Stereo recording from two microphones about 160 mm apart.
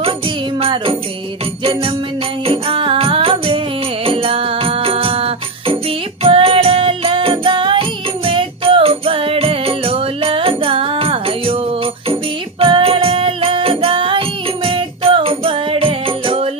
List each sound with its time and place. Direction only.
0.6 s music: 35° right (ahead or behind)